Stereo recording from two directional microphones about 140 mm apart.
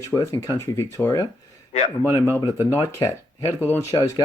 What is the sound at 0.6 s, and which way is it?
Speech, 20° left (ahead or behind).